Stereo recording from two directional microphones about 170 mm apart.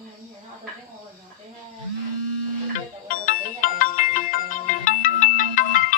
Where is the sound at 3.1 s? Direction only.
50° left (ahead or behind).